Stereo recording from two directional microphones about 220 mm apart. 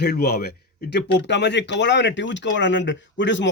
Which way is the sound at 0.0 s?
45° left (ahead or behind).